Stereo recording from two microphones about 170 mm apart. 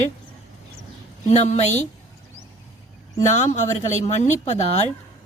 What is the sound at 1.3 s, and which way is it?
Speech, 40° left (ahead or behind).